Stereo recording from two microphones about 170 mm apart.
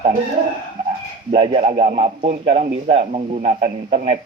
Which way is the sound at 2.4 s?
35° right (ahead or behind).